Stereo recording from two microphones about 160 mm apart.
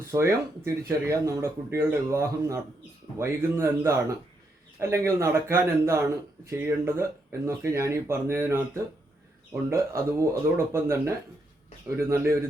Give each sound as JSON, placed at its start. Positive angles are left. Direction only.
{"t": 0.1, "sound": "a man's voice", "side_deg": -15}